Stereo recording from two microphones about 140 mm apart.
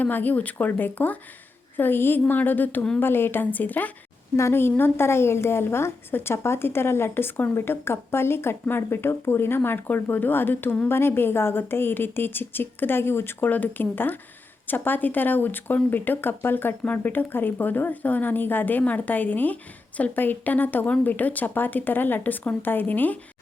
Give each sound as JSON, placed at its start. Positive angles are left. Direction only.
{"t": 0.0, "sound": "a woman's voice", "side_deg": 10}